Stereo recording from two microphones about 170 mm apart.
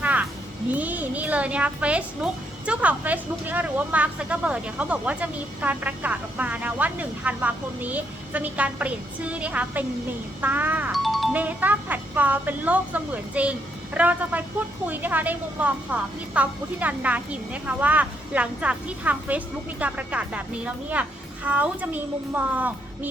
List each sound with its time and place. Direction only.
0.0 s music: 10° right (ahead or behind)
0.7 s a woman's voice: 10° right (ahead or behind)